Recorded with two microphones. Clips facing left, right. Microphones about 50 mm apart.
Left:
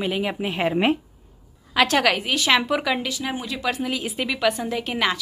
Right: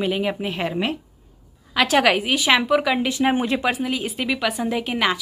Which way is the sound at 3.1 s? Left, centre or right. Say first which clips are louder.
Right 8 dB; right.